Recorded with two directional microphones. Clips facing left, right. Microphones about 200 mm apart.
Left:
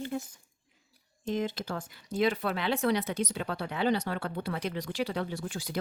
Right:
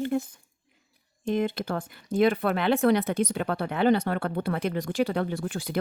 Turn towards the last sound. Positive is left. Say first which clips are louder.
# right 5 dB
turn(degrees=-55)  # may be behind; listen again after turning